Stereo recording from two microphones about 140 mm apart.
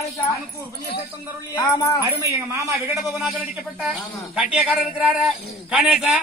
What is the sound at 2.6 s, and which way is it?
Speech, centre (ahead or behind).